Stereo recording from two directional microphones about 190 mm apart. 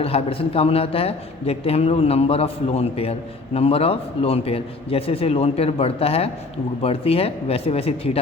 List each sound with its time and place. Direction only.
0.0 s a man's voice: 30° left (ahead or behind)